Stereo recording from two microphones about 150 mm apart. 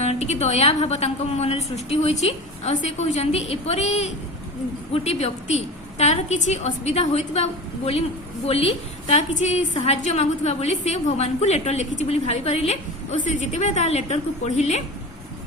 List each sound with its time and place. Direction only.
0.0 s a woman's voice: 50° left (ahead or behind)
8.4 s a woman's voice: 40° left (ahead or behind)